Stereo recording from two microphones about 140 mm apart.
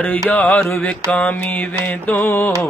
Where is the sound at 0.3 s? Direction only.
10° left (ahead or behind).